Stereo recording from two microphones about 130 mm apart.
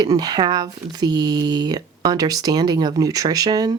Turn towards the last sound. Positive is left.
turn(degrees=-30)  # may be behind; listen again after turning